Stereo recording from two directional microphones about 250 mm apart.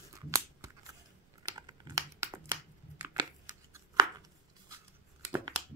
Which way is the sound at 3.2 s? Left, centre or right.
Centre.